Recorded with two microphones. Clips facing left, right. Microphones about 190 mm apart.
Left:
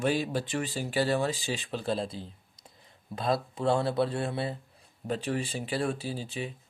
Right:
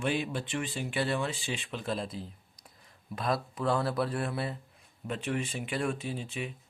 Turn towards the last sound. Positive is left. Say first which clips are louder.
# left 1 dB
turn(degrees=35)  # may be behind; listen again after turning